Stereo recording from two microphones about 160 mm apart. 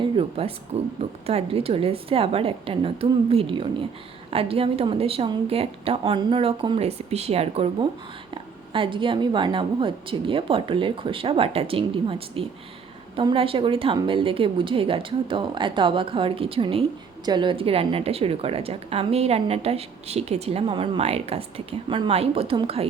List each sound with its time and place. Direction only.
0.0 s a woman's voice: 35° right (ahead or behind)